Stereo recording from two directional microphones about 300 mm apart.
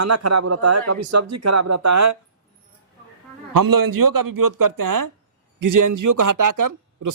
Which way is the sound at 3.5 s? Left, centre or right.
Right.